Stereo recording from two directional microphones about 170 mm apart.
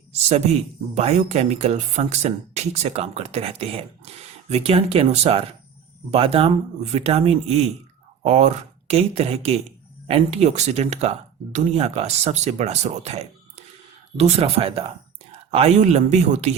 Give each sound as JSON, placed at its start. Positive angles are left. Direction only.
{"t": 0.1, "sound": "speech", "side_deg": -40}